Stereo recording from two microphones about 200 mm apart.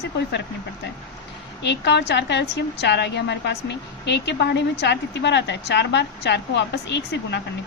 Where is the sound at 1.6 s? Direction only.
55° left (ahead or behind).